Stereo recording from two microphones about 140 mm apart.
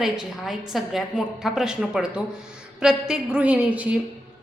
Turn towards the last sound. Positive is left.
turn(degrees=-10)  # may be behind; listen again after turning